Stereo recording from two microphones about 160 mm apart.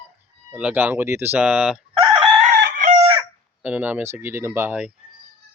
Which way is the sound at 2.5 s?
80° right.